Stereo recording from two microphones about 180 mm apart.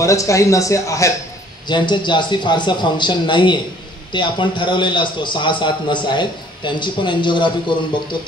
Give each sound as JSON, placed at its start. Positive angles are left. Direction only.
{"t": 0.0, "sound": "a man's voice", "side_deg": 15}